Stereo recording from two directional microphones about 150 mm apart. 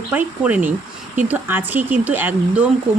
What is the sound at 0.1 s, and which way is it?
Speech, 10° right (ahead or behind).